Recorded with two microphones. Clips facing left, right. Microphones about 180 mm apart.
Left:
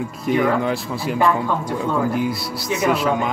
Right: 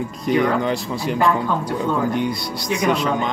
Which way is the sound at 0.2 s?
5° left (ahead or behind).